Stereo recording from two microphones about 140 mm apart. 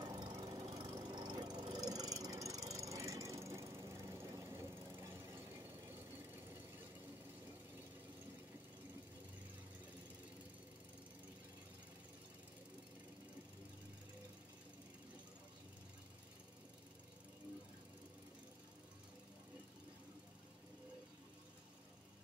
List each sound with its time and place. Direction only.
0.0 s squeal: 30° right (ahead or behind)